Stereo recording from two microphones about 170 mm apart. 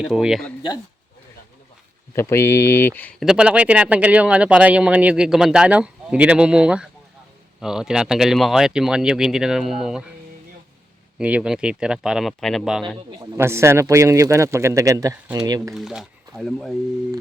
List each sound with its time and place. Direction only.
0.0 s speech: 5° right (ahead or behind)
2.1 s speech: 15° left (ahead or behind)
3.2 s speech: 5° right (ahead or behind)
11.2 s speech: 5° right (ahead or behind)
13.3 s speech: 15° right (ahead or behind)
15.7 s speech: centre (ahead or behind)